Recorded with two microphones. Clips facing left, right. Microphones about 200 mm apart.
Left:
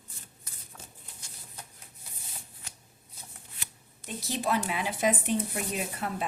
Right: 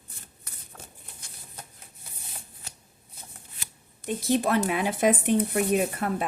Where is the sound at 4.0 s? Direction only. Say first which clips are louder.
Right 10 dB; 55° right (ahead or behind).